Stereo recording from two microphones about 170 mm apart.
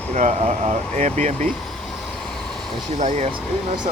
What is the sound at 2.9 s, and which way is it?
Speech, 45° right (ahead or behind).